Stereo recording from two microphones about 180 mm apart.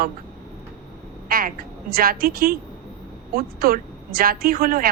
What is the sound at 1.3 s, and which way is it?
A woman's voice, 55° right (ahead or behind).